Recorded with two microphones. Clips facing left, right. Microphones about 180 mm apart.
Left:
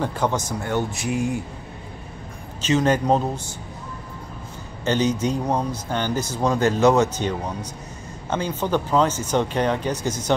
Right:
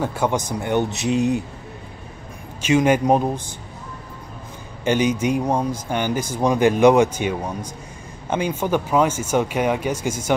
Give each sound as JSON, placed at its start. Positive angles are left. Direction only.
{"t": 0.0, "sound": "speech", "side_deg": -10}
{"t": 2.6, "sound": "speech", "side_deg": -10}
{"t": 4.8, "sound": "speech", "side_deg": -10}